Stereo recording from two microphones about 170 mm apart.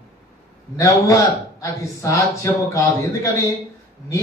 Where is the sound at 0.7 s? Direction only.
20° left (ahead or behind).